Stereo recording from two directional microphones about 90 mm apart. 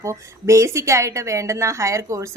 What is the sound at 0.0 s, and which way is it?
A woman's voice, 35° right (ahead or behind).